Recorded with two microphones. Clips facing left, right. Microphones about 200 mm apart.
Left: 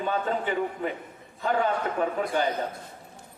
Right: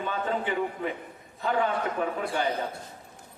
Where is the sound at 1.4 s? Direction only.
40° left (ahead or behind).